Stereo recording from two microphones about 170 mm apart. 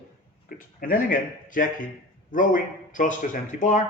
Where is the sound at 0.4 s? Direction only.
55° left (ahead or behind).